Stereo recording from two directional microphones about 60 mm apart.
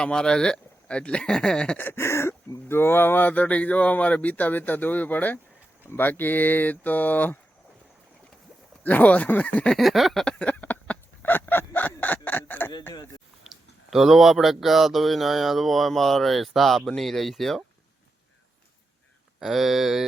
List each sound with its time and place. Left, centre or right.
0.0 s speech: centre
1.8 s speech: left
8.8 s speech: left
9.7 s speech: centre
10.2 s chicken: left
13.5 s speech: centre
19.4 s speech: centre